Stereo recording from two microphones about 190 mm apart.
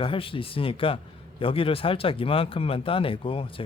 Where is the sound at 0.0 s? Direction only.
25° left (ahead or behind).